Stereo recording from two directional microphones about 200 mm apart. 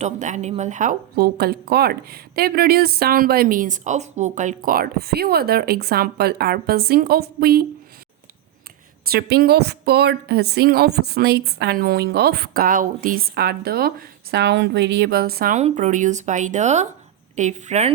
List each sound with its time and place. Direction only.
0.0 s speech: 35° right (ahead or behind)
9.0 s speech: 50° right (ahead or behind)
15.5 s speech: 35° right (ahead or behind)